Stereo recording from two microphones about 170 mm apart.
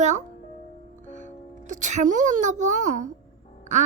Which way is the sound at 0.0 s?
45° right (ahead or behind).